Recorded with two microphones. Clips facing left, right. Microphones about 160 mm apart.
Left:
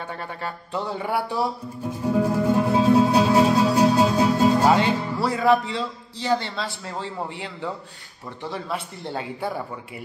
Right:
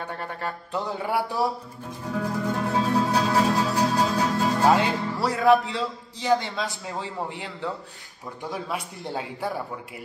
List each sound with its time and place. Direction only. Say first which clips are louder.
0.1 s speech: even; centre (ahead or behind)
2.0 s music: left 7 dB; 15° left (ahead or behind)
4.7 s speech: left 2 dB; centre (ahead or behind)
8.5 s speech: left 1 dB; 10° right (ahead or behind)